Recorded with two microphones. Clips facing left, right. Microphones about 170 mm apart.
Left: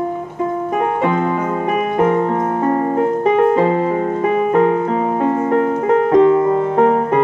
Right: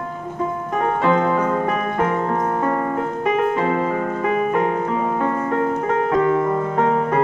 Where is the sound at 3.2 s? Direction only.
30° left (ahead or behind).